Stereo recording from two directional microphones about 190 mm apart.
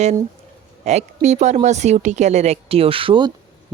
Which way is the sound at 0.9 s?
35° right (ahead or behind).